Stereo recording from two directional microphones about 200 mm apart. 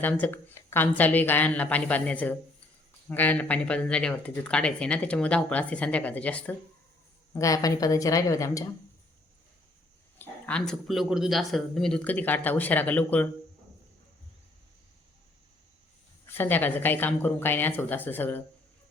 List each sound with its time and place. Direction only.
0.0 s speech: 10° left (ahead or behind)
10.2 s speech: 5° left (ahead or behind)
16.2 s speech: 10° left (ahead or behind)